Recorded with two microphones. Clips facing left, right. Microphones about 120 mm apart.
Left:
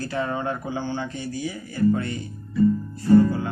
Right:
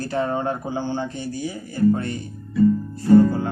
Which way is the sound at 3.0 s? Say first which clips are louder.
Right 2 dB; 45° right (ahead or behind).